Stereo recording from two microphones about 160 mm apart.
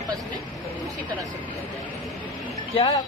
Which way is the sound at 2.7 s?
35° left (ahead or behind).